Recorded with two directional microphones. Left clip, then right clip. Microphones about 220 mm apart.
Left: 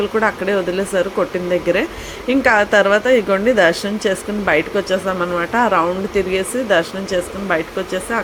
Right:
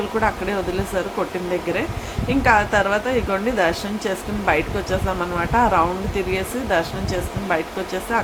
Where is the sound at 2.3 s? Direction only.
20° left (ahead or behind).